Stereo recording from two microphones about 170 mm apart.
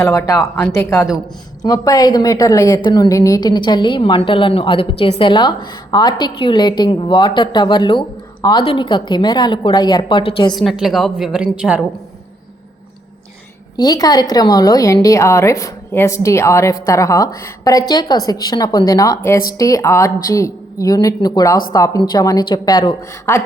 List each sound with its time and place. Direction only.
0.0 s a woman's voice: 15° left (ahead or behind)
10.6 s a woman's voice: centre (ahead or behind)
13.7 s a woman's voice: 20° left (ahead or behind)